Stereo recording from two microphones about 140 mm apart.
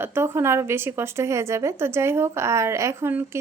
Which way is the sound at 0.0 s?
15° right (ahead or behind).